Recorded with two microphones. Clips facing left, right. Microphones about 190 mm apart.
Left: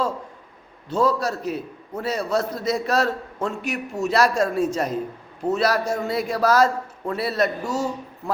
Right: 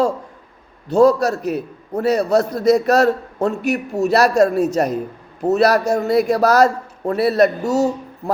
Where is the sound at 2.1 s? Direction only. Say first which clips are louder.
Right 5 dB; 40° right (ahead or behind).